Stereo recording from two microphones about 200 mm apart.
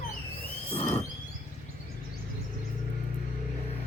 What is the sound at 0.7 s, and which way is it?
Squeal, 30° left (ahead or behind).